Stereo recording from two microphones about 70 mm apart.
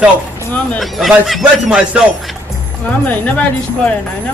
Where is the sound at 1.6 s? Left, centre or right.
Centre.